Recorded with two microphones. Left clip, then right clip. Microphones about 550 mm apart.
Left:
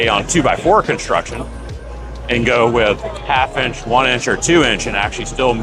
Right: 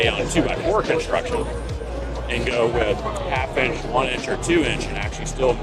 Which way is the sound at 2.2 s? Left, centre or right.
Left.